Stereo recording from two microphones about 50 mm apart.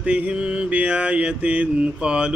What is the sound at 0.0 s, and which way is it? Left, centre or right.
Mantra, right.